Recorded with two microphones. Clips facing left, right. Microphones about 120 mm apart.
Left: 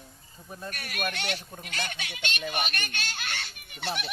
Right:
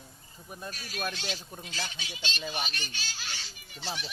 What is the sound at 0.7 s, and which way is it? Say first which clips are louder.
Speech: left 3 dB; 65° left (ahead or behind).